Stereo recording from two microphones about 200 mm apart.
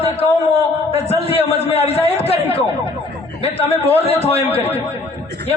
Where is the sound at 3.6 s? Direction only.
30° left (ahead or behind).